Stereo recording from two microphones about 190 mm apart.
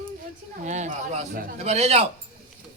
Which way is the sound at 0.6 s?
40° right (ahead or behind).